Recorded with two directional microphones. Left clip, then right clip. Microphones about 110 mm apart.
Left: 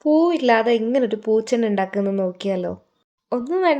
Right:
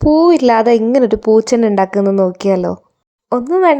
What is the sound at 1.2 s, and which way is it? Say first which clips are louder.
A woman's voice: right 8 dB; 75° right (ahead or behind).